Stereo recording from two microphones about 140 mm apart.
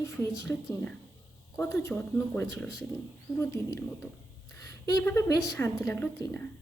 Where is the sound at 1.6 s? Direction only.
20° left (ahead or behind).